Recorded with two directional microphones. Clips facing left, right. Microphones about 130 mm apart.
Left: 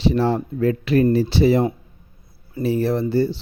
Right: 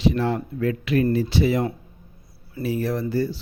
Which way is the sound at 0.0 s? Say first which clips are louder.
Left 3 dB; 30° left (ahead or behind).